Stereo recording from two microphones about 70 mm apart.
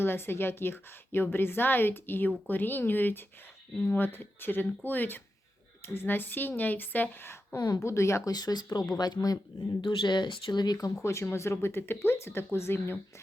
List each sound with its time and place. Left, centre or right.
0.0 s a woman's voice: left
8.3 s speech: left
9.8 s speech: left
11.0 s a woman's voice: left